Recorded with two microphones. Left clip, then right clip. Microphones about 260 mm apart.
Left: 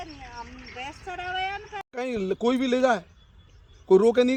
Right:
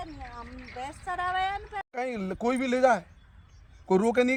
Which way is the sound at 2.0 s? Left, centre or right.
Centre.